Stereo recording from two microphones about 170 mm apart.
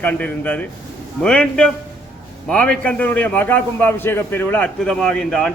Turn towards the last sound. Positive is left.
turn(degrees=5)  # may be behind; listen again after turning